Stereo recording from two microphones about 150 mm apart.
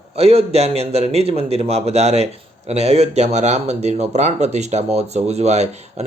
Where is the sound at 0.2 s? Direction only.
45° right (ahead or behind).